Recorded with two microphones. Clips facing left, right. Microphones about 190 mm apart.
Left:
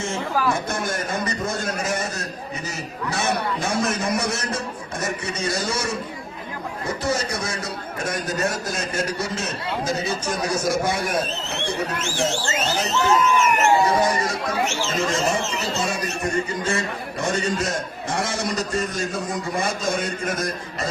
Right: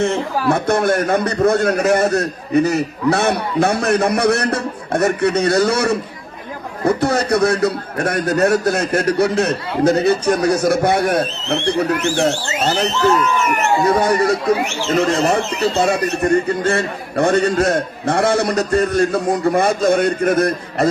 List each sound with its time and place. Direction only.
0.0 s speech: 65° right (ahead or behind)